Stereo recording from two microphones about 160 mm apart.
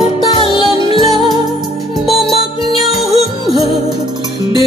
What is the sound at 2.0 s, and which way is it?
Music, centre (ahead or behind).